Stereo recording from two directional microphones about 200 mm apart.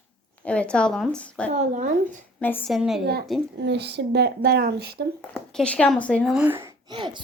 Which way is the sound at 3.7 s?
55° right (ahead or behind).